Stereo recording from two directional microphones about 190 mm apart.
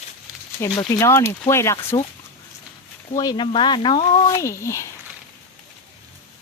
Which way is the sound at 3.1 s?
25° left (ahead or behind).